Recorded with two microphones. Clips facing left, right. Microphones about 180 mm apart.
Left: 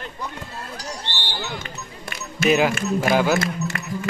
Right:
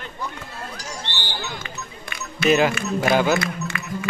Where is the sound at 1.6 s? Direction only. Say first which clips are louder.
Even; 45° left (ahead or behind).